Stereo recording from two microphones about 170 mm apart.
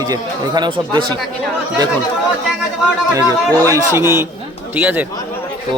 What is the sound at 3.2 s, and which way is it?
A man's voice, 20° right (ahead or behind).